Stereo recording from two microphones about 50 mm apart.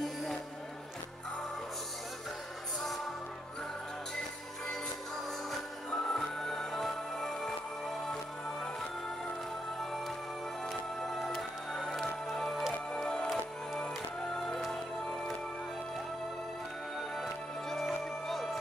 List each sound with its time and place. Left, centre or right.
0.0 s music: centre
6.0 s music: centre
10.7 s music: centre
12.9 s music: centre
14.3 s music: centre
17.2 s music: centre